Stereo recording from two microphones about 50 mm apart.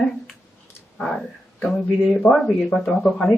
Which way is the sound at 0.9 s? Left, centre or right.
Centre.